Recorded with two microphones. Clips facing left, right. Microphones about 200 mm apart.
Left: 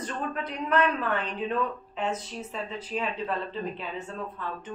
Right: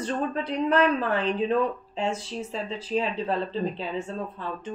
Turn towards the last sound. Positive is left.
turn(degrees=-30)  # may be behind; listen again after turning